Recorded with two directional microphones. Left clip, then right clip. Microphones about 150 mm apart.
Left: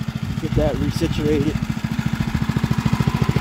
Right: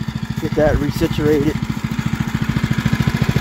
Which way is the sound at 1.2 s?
Centre (ahead or behind).